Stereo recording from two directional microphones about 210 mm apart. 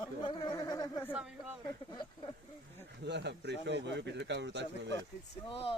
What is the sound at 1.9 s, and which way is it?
Speech, 20° left (ahead or behind).